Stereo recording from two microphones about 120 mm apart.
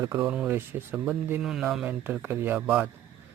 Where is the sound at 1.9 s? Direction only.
15° right (ahead or behind).